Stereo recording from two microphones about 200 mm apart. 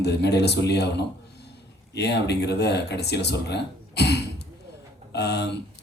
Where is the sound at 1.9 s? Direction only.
55° left (ahead or behind).